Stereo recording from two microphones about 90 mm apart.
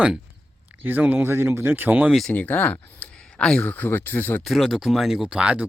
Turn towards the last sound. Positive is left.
turn(degrees=-10)  # may be behind; listen again after turning